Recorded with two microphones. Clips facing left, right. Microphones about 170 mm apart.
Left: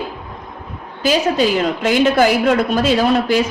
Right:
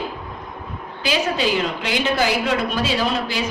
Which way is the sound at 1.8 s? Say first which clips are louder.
Left 10 dB; 50° left (ahead or behind).